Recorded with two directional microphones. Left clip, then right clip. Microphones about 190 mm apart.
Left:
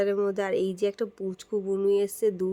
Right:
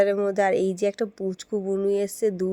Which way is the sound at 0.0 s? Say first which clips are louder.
Right 5 dB; 20° right (ahead or behind).